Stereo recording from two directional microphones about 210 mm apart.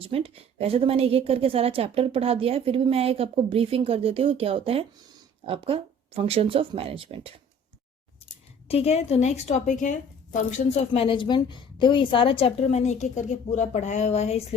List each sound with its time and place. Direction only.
0.0 s a woman's voice: 25° right (ahead or behind)
8.6 s a woman's voice: 30° left (ahead or behind)